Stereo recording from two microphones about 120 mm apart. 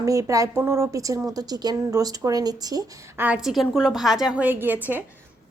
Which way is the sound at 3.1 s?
10° right (ahead or behind).